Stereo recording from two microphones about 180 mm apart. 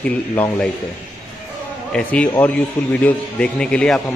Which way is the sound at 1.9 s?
5° left (ahead or behind).